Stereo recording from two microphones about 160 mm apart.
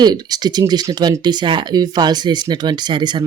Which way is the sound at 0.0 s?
25° right (ahead or behind).